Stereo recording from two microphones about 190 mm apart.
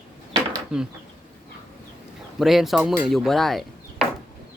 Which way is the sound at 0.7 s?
5° right (ahead or behind).